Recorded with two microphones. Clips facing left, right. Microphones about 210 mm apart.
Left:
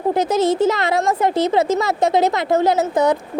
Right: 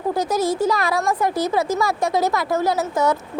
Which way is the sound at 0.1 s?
20° left (ahead or behind).